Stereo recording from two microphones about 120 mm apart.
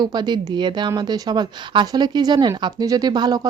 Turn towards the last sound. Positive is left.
turn(degrees=-35)  # may be behind; listen again after turning